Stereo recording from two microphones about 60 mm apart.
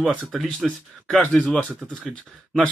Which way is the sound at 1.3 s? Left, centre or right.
Centre.